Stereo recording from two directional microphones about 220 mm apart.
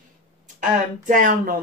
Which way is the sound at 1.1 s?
35° right (ahead or behind).